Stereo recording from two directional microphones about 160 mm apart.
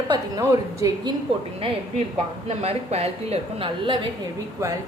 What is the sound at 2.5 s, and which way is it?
A woman's voice, 40° right (ahead or behind).